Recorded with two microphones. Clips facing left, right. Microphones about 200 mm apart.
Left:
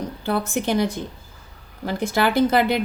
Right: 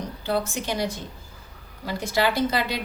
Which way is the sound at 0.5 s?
55° left (ahead or behind).